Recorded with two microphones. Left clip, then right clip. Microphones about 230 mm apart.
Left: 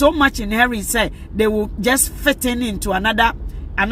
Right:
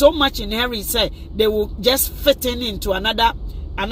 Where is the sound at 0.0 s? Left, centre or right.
Left.